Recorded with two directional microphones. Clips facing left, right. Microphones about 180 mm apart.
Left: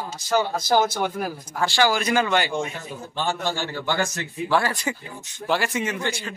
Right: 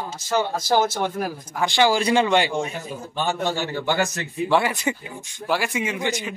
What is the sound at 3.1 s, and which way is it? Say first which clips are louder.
A man's voice: right 2 dB; 15° right (ahead or behind).